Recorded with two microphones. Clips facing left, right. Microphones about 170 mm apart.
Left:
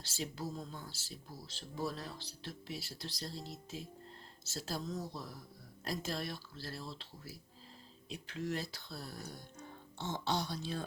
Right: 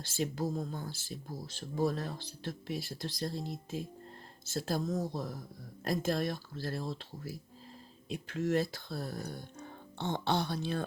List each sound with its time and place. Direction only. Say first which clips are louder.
0.0 s speech: right 7 dB; 50° right (ahead or behind)